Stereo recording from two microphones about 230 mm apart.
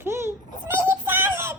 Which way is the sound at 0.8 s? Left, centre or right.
Centre.